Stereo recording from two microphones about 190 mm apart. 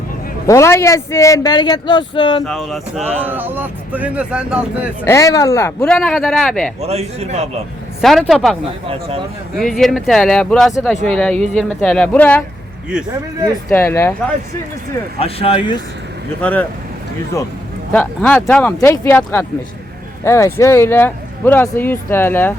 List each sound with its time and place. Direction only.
0.4 s speech: 15° left (ahead or behind)
2.4 s speech: centre (ahead or behind)
3.2 s speech: 10° right (ahead or behind)
5.0 s speech: 15° left (ahead or behind)
6.8 s a man's voice: 35° right (ahead or behind)
8.0 s speech: centre (ahead or behind)
8.9 s speech: 30° right (ahead or behind)
9.6 s speech: centre (ahead or behind)
13.7 s speech: 15° left (ahead or behind)
15.2 s speech: 30° left (ahead or behind)
16.4 s speech: 10° left (ahead or behind)
17.9 s speech: 10° left (ahead or behind)